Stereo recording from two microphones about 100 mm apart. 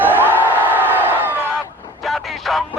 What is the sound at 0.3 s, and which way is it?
Crowd, 20° right (ahead or behind).